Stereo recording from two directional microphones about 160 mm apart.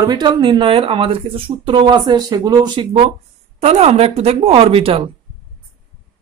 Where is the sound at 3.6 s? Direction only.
40° right (ahead or behind).